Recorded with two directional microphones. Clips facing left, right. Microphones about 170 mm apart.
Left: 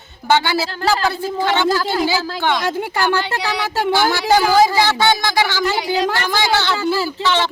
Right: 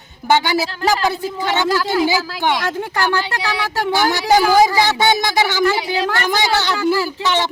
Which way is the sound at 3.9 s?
15° right (ahead or behind).